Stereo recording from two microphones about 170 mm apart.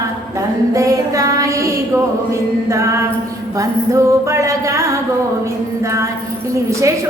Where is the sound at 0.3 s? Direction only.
20° right (ahead or behind).